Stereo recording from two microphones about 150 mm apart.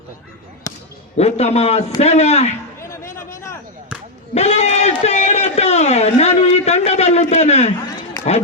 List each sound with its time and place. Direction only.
0.7 s basketball bounce: 25° left (ahead or behind)
1.1 s a man's voice: 45° left (ahead or behind)
2.8 s music: 20° left (ahead or behind)
4.4 s a sound: 50° left (ahead or behind)